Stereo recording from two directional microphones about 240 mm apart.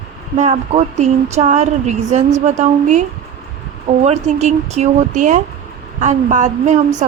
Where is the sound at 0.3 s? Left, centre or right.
Right.